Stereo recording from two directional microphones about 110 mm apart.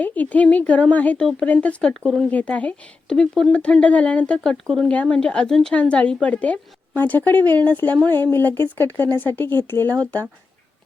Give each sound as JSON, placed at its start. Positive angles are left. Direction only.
{"t": 0.0, "sound": "a woman's voice", "side_deg": 15}